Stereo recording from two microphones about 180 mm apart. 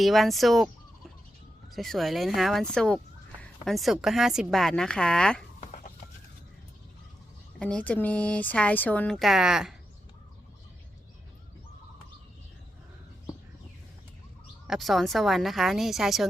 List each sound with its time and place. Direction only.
0.0 s a woman's voice: centre (ahead or behind)
1.7 s a woman's voice: centre (ahead or behind)
5.5 s a sound: 50° left (ahead or behind)
7.6 s speech: 5° left (ahead or behind)
14.7 s a woman's voice: centre (ahead or behind)